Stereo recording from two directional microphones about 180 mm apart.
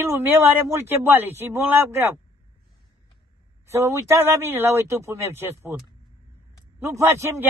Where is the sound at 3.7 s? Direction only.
15° right (ahead or behind).